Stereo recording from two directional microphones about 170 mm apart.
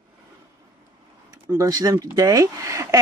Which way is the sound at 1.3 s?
20° right (ahead or behind).